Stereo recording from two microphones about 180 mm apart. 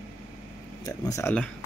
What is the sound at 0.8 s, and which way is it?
Speech, 20° left (ahead or behind).